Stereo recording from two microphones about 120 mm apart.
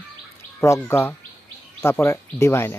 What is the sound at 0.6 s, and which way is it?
Speech, 20° left (ahead or behind).